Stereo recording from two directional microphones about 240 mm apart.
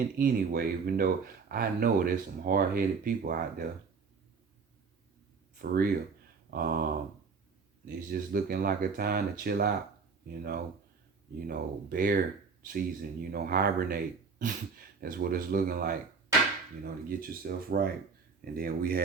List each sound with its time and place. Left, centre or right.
0.2 s speech: right
5.5 s speech: right
7.9 s speech: right